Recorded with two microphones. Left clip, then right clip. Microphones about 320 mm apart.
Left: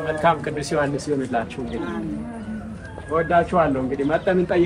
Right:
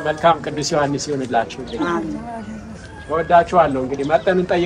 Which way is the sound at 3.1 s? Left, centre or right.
Right.